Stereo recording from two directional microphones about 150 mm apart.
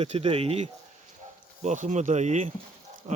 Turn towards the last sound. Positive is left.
turn(degrees=-45)  # may be behind; listen again after turning